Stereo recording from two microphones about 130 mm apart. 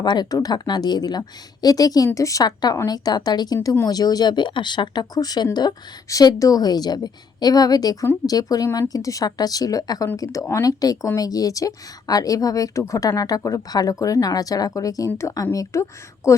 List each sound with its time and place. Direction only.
0.0 s a woman's voice: 35° left (ahead or behind)